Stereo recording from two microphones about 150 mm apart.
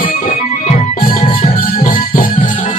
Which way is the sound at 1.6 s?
70° left (ahead or behind).